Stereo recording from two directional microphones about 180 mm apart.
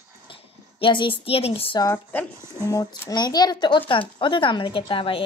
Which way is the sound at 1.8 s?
10° left (ahead or behind).